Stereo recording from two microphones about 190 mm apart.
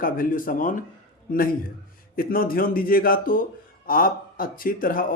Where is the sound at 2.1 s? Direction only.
50° left (ahead or behind).